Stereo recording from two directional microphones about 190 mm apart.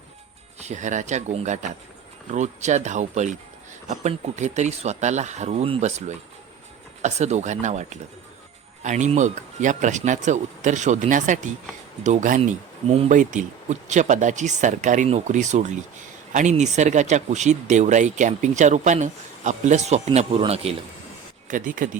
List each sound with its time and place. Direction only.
0.6 s speech: 40° right (ahead or behind)
21.4 s speech: 45° right (ahead or behind)